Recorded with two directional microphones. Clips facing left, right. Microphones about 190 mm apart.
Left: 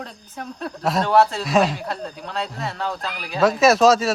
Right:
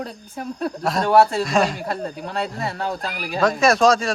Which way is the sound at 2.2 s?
55° right (ahead or behind).